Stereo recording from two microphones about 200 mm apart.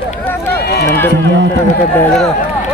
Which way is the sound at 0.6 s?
55° left (ahead or behind).